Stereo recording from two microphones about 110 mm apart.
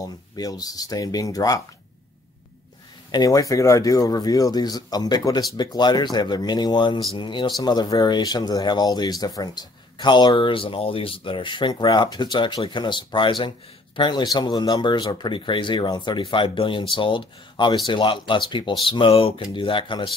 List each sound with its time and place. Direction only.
0.0 s speech: 35° left (ahead or behind)
3.1 s speech: 35° left (ahead or behind)